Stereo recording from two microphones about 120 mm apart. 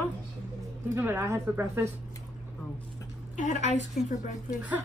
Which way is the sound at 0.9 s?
20° right (ahead or behind).